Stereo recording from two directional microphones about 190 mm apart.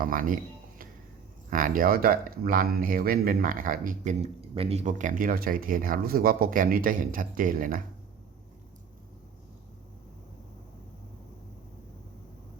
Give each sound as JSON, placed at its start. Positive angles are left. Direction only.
{"t": 0.0, "sound": "speech", "side_deg": -45}
{"t": 1.5, "sound": "speech", "side_deg": -45}